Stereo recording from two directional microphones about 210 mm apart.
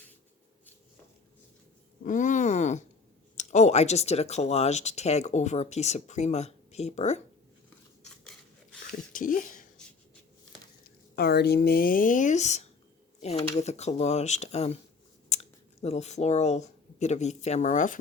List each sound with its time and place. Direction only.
2.0 s a sound: 35° left (ahead or behind)
3.3 s speech: 35° left (ahead or behind)
8.2 s filing: 5° left (ahead or behind)
9.1 s speech: 40° left (ahead or behind)
11.1 s speech: 50° left (ahead or behind)